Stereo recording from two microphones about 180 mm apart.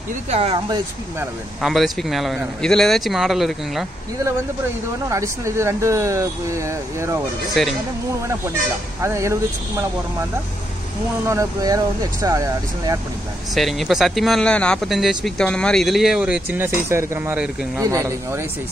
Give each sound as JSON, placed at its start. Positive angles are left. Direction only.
{"t": 0.3, "sound": "speech", "side_deg": -35}
{"t": 1.6, "sound": "speech", "side_deg": 0}
{"t": 5.1, "sound": "speech", "side_deg": -15}
{"t": 7.6, "sound": "speech", "side_deg": 0}
{"t": 9.0, "sound": "speech", "side_deg": -15}
{"t": 11.2, "sound": "speech", "side_deg": -20}
{"t": 13.6, "sound": "speech", "side_deg": 0}